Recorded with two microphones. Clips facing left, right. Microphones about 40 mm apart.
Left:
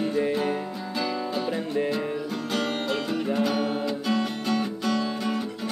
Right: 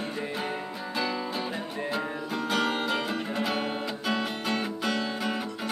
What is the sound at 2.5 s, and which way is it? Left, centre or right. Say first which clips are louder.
Music: right 1 dB; centre.